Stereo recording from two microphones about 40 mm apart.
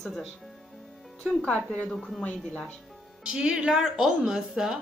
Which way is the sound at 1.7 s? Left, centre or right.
Left.